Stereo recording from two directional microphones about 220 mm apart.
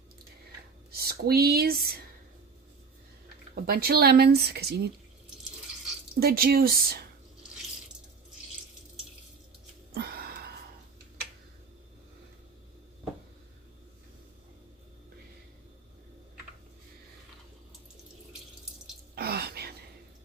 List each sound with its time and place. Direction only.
0.9 s speech: 45° right (ahead or behind)
3.5 s speech: 45° right (ahead or behind)
6.1 s speech: 45° right (ahead or behind)
9.9 s gasp: 45° right (ahead or behind)
19.1 s a sound: 45° right (ahead or behind)